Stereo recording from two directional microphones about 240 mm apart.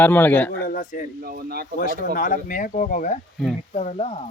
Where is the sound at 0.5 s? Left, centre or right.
Left.